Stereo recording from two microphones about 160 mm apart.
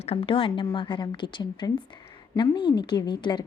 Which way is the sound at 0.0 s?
35° left (ahead or behind).